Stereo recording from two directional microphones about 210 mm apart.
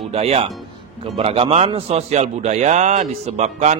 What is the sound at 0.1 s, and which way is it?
A man's voice, 30° right (ahead or behind).